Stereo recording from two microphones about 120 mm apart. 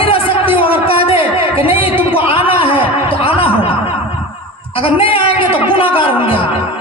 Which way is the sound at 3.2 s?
50° left (ahead or behind).